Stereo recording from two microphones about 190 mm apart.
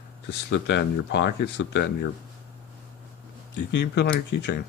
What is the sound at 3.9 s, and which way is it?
Speech, 65° left (ahead or behind).